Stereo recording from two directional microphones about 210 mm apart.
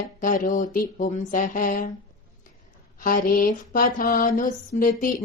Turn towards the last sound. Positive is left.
turn(degrees=40)  # may be behind; listen again after turning